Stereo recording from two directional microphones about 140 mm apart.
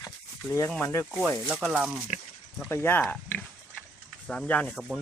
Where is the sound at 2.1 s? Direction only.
55° left (ahead or behind).